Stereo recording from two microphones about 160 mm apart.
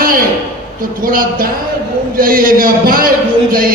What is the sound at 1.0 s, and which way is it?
A man's voice, 60° right (ahead or behind).